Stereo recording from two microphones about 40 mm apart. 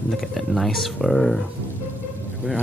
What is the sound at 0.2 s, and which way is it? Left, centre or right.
Speech, centre.